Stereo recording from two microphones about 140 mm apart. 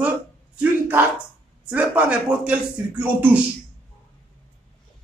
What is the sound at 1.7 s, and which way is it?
Speech, 10° right (ahead or behind).